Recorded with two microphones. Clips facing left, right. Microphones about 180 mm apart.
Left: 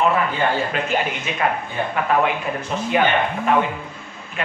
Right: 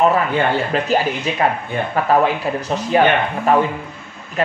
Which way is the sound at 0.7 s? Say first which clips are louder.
Right 4 dB; 35° right (ahead or behind).